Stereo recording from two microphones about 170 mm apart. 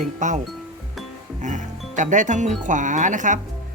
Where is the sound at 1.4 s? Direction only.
45° right (ahead or behind).